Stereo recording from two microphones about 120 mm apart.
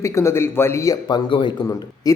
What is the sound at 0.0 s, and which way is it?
Speech, 25° left (ahead or behind).